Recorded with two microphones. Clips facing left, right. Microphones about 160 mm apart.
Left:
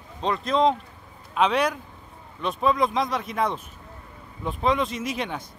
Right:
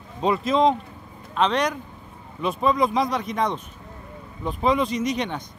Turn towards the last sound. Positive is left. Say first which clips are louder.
# right 4 dB
turn(degrees=5)  # may be behind; listen again after turning